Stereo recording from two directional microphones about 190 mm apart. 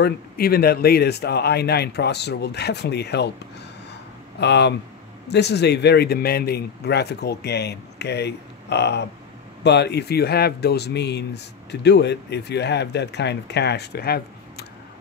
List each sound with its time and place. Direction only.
0.0 s speech: 55° left (ahead or behind)
4.4 s speech: 65° left (ahead or behind)